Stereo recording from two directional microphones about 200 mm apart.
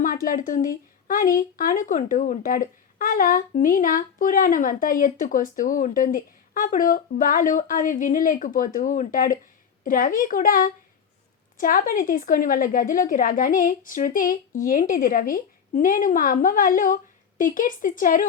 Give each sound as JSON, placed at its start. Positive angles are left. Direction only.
{"t": 0.0, "sound": "speech", "side_deg": 45}